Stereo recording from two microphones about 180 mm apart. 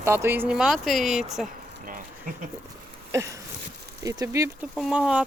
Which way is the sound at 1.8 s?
50° right (ahead or behind).